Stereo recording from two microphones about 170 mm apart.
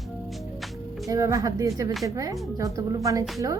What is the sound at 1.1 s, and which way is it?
A woman's voice, 20° right (ahead or behind).